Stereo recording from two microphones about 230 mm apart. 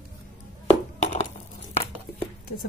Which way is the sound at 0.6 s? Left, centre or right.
Left.